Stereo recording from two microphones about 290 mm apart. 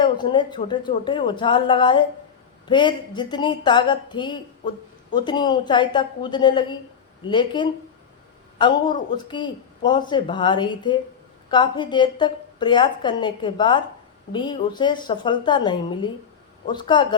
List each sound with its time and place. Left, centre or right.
0.0 s speech: centre